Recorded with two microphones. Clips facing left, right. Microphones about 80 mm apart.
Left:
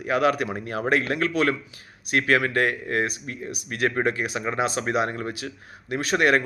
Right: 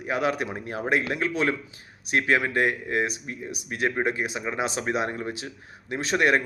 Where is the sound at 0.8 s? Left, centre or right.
Left.